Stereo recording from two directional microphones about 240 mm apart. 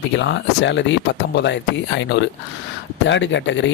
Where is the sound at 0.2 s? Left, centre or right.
Left.